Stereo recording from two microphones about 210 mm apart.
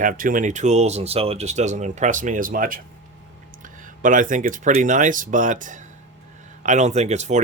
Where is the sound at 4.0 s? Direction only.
40° right (ahead or behind).